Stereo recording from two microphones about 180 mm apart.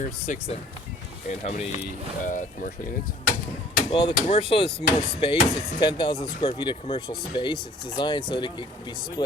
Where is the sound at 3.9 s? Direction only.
30° left (ahead or behind).